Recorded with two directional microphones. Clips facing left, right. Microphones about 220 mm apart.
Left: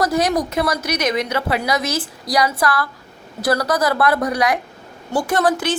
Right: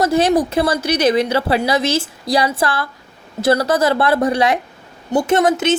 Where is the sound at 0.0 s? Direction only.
30° right (ahead or behind).